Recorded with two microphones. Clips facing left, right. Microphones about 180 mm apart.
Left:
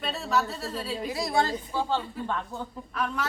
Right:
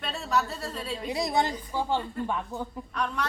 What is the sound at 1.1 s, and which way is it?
Speech, 20° right (ahead or behind).